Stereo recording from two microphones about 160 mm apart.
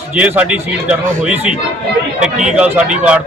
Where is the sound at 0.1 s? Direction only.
10° right (ahead or behind).